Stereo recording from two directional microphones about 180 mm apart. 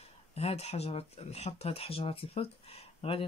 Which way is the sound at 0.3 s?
35° left (ahead or behind).